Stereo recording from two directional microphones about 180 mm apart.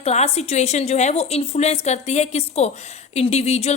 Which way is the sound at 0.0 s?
35° left (ahead or behind).